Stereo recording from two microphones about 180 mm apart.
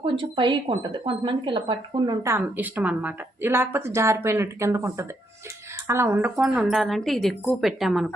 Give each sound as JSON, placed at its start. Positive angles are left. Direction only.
{"t": 0.0, "sound": "a woman's voice", "side_deg": -25}